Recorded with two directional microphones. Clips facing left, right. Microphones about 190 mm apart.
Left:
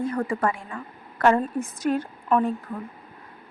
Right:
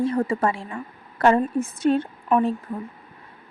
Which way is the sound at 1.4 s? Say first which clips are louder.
Right 4 dB; 10° right (ahead or behind).